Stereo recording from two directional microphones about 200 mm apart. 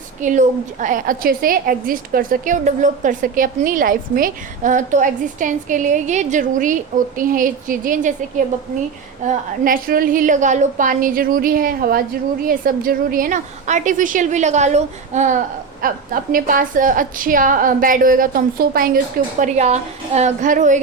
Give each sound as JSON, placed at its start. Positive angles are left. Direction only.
{"t": 0.2, "sound": "a woman's voice", "side_deg": -40}
{"t": 9.2, "sound": "a woman's voice", "side_deg": -40}
{"t": 19.4, "sound": "a woman's voice", "side_deg": -35}